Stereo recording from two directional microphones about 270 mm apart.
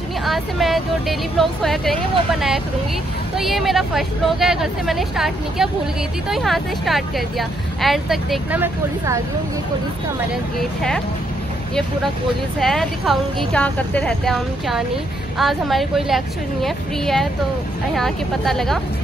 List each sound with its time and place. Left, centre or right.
0.2 s speech: centre
3.3 s speech: centre
10.6 s speech: centre
12.5 s speech: centre